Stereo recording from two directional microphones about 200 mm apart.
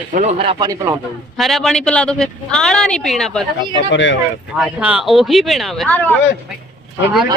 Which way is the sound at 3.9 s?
65° left (ahead or behind).